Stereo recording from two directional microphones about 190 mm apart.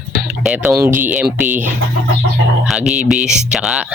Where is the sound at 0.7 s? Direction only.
10° right (ahead or behind).